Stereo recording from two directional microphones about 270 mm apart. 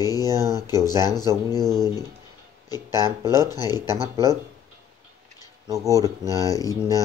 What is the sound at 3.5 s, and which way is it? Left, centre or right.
Speech, centre.